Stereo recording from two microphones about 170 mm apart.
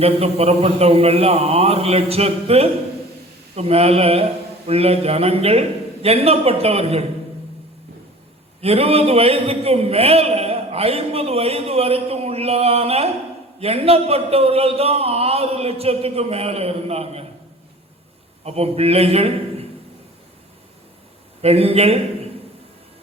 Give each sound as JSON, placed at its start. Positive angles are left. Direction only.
{"t": 0.0, "sound": "a man's voice", "side_deg": -35}
{"t": 8.6, "sound": "a man's voice", "side_deg": -35}
{"t": 18.4, "sound": "a man's voice", "side_deg": -35}
{"t": 21.4, "sound": "a man's voice", "side_deg": -35}